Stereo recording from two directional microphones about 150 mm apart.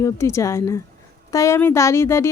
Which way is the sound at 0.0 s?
20° left (ahead or behind).